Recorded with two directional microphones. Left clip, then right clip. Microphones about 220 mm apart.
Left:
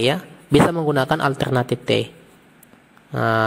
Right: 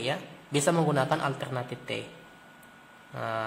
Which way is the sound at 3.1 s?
45° left (ahead or behind).